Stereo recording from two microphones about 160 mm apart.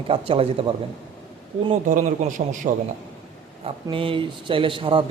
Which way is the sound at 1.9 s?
55° right (ahead or behind).